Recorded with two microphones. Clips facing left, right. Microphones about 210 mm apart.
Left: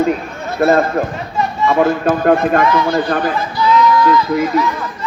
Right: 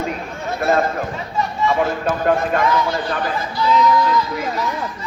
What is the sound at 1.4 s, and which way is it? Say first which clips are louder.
A man's voice: left 5 dB; 55° left (ahead or behind).